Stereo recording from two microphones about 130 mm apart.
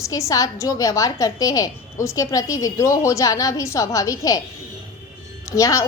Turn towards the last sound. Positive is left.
turn(degrees=25)  # may be behind; listen again after turning